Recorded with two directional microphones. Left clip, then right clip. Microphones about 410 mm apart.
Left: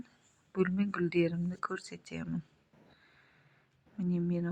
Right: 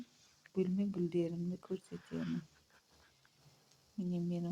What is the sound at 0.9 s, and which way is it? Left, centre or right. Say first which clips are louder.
Speech: left 7 dB; right.